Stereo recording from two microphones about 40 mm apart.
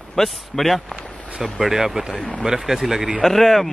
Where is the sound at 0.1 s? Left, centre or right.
Centre.